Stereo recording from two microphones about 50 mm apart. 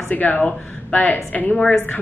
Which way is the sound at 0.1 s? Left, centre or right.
Left.